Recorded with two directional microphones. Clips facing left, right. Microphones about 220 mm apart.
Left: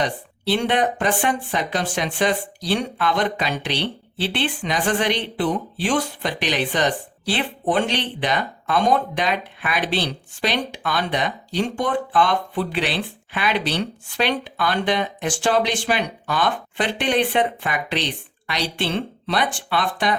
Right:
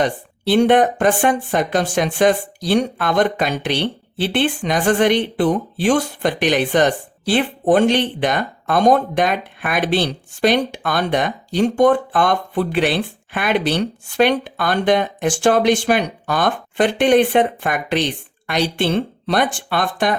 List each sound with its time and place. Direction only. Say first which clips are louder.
0.0 s speech: right 4 dB; 50° right (ahead or behind)